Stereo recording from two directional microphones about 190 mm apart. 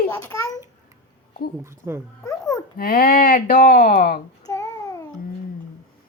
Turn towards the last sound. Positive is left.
turn(degrees=15)  # may be behind; listen again after turning